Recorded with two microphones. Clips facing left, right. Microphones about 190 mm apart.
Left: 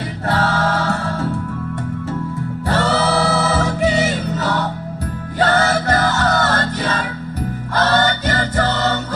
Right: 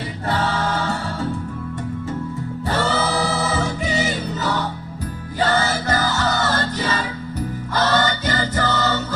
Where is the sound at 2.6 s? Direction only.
70° left (ahead or behind).